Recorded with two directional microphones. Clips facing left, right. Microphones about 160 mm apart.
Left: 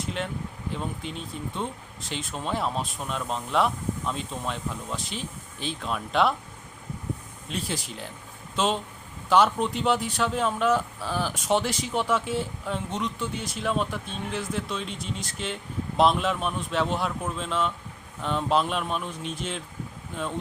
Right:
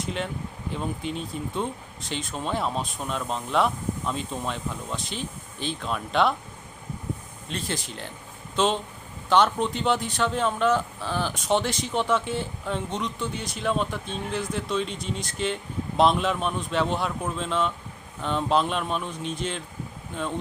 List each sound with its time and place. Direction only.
0.0 s speech: centre (ahead or behind)
7.5 s speech: 5° left (ahead or behind)